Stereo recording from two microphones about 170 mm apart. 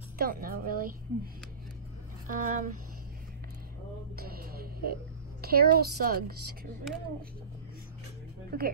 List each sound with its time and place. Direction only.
0.2 s a sound: 60° right (ahead or behind)
2.2 s speech: 50° right (ahead or behind)
4.2 s music: 60° right (ahead or behind)
5.4 s a woman's voice: 65° right (ahead or behind)
8.5 s speech: 65° right (ahead or behind)